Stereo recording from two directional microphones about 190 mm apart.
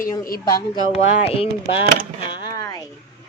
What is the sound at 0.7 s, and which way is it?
Speech, 30° left (ahead or behind).